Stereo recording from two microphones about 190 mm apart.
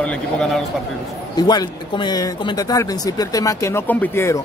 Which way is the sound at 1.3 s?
20° left (ahead or behind).